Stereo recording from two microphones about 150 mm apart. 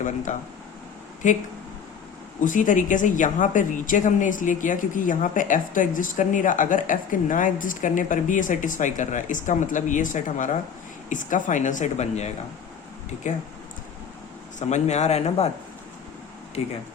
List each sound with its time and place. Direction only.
0.3 s a woman's voice: 55° left (ahead or behind)
2.4 s a woman's voice: 60° left (ahead or behind)
14.7 s speech: 50° left (ahead or behind)
16.6 s speech: 45° left (ahead or behind)